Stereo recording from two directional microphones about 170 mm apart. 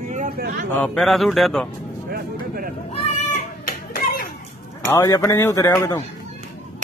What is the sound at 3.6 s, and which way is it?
Children playing, 55° left (ahead or behind).